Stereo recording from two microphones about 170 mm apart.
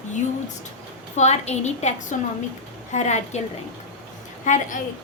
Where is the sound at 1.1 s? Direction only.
40° left (ahead or behind).